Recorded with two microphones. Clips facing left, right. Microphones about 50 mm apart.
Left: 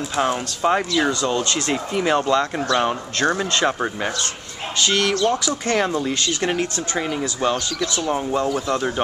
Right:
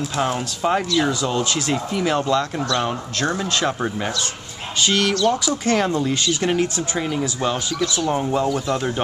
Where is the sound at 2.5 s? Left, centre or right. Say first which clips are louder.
Left 2 dB; left.